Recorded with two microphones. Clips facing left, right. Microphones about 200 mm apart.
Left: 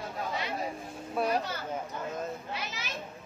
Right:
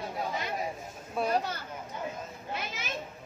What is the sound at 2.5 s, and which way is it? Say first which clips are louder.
Children playing: right 1 dB; 50° right (ahead or behind).